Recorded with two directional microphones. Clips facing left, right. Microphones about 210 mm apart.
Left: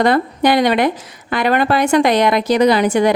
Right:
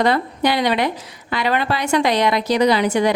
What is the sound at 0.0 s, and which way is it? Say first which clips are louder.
A woman's voice: left 4 dB; 50° left (ahead or behind).